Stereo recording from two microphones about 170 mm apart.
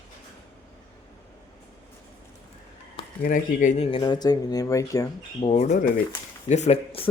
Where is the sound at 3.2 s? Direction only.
50° left (ahead or behind).